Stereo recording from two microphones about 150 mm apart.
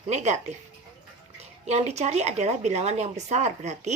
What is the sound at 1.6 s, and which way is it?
Speech, 50° right (ahead or behind).